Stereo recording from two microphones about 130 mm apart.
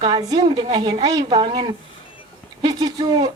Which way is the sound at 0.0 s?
30° right (ahead or behind).